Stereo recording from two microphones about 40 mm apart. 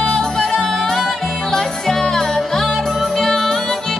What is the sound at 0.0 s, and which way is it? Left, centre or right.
Music, centre.